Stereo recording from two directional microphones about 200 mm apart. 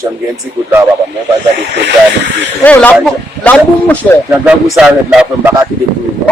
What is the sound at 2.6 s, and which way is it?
Speech, 5° left (ahead or behind).